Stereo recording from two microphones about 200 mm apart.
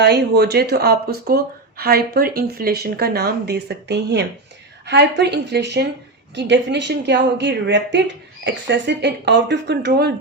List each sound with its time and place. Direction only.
0.0 s a woman's voice: 55° right (ahead or behind)